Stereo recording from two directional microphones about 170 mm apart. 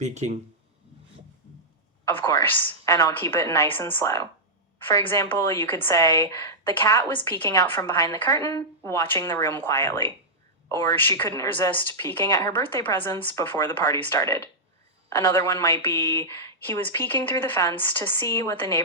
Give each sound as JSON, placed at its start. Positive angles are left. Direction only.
{"t": 0.0, "sound": "speech", "side_deg": -45}
{"t": 2.0, "sound": "a woman's voice", "side_deg": 15}